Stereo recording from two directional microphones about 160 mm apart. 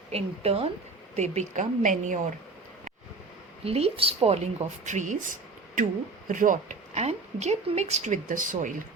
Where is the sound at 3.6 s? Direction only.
40° right (ahead or behind).